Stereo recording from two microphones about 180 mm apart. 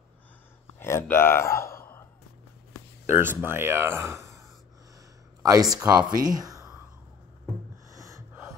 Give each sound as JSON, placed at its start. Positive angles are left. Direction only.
{"t": 0.7, "sound": "speech", "side_deg": 15}
{"t": 3.2, "sound": "speech", "side_deg": -10}
{"t": 5.4, "sound": "speech", "side_deg": -20}
{"t": 7.9, "sound": "gasp", "side_deg": -15}